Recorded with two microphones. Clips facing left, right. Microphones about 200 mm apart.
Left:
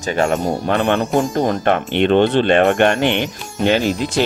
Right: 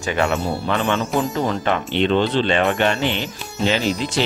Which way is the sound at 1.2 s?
40° left (ahead or behind).